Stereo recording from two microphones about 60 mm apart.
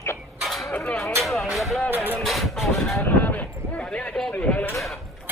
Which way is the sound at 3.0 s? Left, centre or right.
Left.